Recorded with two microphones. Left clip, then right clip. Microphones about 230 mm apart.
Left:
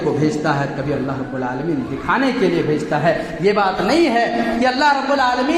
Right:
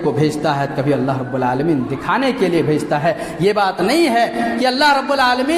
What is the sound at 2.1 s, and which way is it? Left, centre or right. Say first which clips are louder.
A man's voice: even; right.